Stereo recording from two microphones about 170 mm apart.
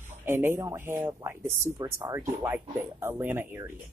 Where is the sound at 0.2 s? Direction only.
15° right (ahead or behind).